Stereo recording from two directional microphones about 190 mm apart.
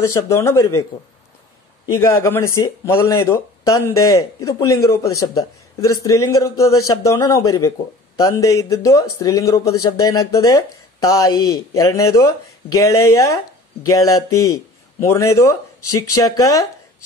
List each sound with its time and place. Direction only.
0.0 s a man's voice: 15° left (ahead or behind)
1.9 s a man's voice: 15° left (ahead or behind)